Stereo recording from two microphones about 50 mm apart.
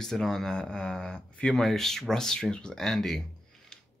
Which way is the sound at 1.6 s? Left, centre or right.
Centre.